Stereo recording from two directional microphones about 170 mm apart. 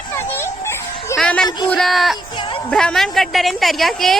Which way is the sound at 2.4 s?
30° left (ahead or behind).